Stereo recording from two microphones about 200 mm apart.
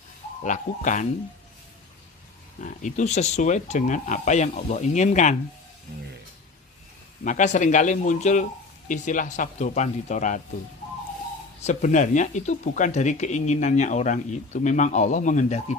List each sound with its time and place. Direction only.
0.4 s speech: 40° left (ahead or behind)
2.6 s speech: 35° left (ahead or behind)
7.2 s speech: 40° left (ahead or behind)
11.6 s speech: 40° left (ahead or behind)